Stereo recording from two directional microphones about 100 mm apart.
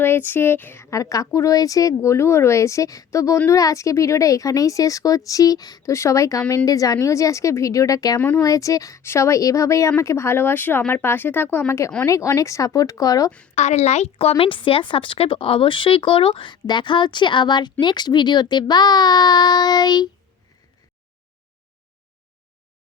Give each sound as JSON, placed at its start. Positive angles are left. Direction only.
{"t": 0.0, "sound": "speech", "side_deg": 20}
{"t": 13.8, "sound": "speech", "side_deg": 90}